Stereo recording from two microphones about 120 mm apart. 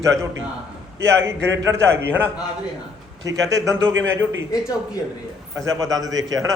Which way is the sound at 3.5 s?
25° right (ahead or behind).